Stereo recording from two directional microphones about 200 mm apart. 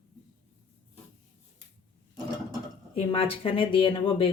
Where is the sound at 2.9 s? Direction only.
30° left (ahead or behind).